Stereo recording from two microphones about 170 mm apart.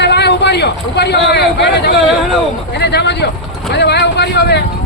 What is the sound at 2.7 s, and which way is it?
Speech, 75° left (ahead or behind).